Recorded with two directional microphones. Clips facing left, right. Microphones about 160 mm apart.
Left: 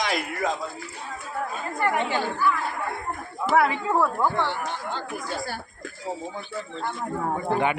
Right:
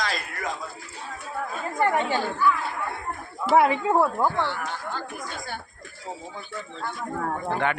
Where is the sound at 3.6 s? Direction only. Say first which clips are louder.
Right 2 dB; 20° right (ahead or behind).